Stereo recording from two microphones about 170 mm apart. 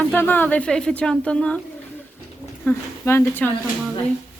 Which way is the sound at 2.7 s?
10° left (ahead or behind).